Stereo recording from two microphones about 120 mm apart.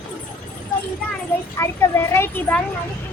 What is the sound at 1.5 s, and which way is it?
A child's voice, 20° left (ahead or behind).